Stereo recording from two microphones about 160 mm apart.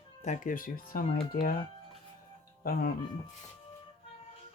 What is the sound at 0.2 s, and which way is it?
Speech, 50° left (ahead or behind).